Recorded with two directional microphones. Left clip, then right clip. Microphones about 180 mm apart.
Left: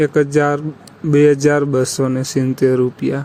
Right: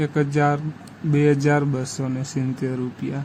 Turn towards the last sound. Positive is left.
turn(degrees=25)  # may be behind; listen again after turning